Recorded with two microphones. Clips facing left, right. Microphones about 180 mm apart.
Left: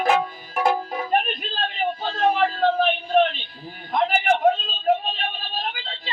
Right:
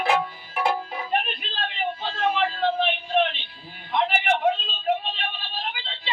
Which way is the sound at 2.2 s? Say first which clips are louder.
Left 4 dB; 40° left (ahead or behind).